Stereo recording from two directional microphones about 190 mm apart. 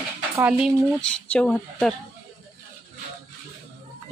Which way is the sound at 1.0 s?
5° left (ahead or behind).